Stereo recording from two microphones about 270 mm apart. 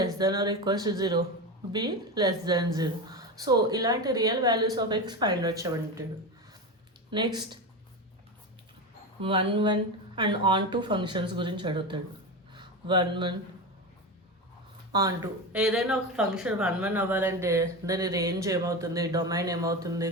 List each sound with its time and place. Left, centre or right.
0.0 s speech: centre
7.1 s speech: centre
9.2 s speech: centre
15.5 s speech: centre